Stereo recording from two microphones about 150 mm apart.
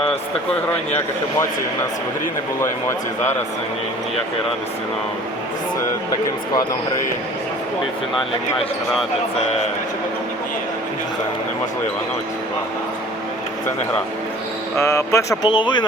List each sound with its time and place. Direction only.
14.8 s speech: 20° left (ahead or behind)
15.4 s speech: 30° left (ahead or behind)